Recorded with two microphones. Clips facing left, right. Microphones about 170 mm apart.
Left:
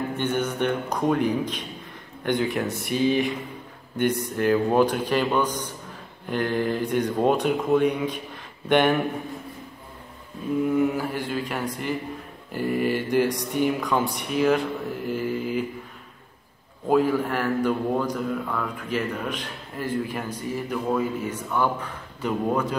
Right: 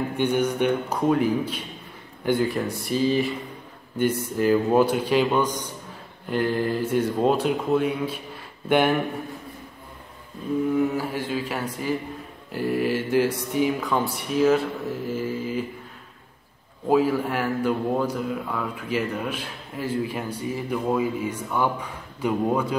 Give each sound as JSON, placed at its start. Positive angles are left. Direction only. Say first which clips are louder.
{"t": 0.1, "sound": "a man's voice", "louder": "right 3 dB", "side_deg": -10}
{"t": 2.9, "sound": "speech", "louder": "even", "side_deg": 65}
{"t": 4.4, "sound": "a man's voice", "louder": "right 1 dB", "side_deg": -5}
{"t": 10.7, "sound": "speech", "louder": "left 1 dB", "side_deg": 0}
{"t": 16.9, "sound": "a man's voice", "louder": "even", "side_deg": -10}